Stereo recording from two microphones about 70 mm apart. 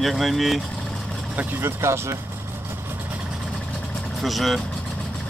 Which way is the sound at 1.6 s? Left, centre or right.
Right.